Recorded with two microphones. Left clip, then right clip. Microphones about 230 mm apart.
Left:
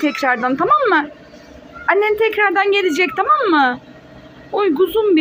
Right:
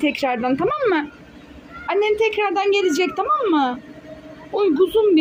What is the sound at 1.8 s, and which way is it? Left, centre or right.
Speech, centre.